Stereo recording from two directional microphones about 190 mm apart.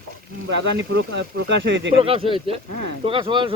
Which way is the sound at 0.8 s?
65° right (ahead or behind).